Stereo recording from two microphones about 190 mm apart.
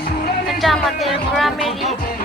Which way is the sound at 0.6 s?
Centre (ahead or behind).